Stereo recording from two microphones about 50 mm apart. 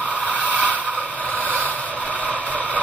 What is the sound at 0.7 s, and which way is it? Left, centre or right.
Scrape, left.